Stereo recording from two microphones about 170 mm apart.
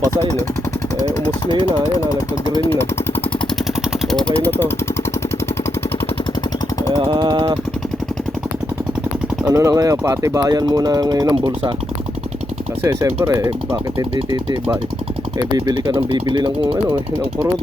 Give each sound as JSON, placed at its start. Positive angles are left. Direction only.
{"t": 4.1, "sound": "speech", "side_deg": 5}
{"t": 6.9, "sound": "a sound", "side_deg": -25}
{"t": 9.5, "sound": "speech", "side_deg": -20}
{"t": 12.8, "sound": "speech", "side_deg": -15}
{"t": 15.4, "sound": "speech", "side_deg": -25}